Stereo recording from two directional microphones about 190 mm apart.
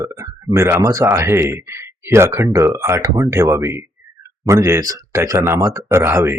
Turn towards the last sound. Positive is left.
turn(degrees=-15)  # may be behind; listen again after turning